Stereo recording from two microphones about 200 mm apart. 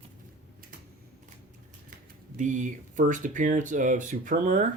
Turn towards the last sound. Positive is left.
turn(degrees=-40)  # may be behind; listen again after turning